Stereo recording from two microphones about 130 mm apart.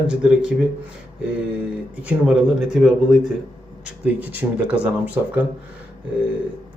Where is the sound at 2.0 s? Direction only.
5° right (ahead or behind).